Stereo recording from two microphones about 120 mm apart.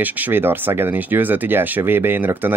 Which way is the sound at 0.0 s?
15° right (ahead or behind).